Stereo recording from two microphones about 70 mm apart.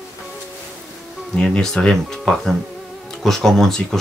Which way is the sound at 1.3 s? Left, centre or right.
Centre.